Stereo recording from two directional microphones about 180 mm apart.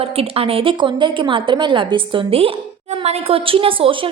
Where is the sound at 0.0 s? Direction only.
35° right (ahead or behind).